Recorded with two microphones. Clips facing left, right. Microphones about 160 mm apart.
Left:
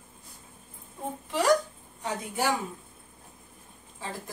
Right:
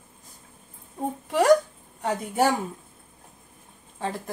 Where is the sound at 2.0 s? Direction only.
55° right (ahead or behind).